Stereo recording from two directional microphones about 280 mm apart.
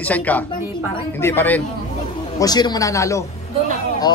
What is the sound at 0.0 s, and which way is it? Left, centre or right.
A woman's voice, centre.